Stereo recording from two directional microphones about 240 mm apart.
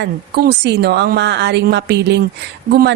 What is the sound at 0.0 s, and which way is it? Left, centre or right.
Speech, right.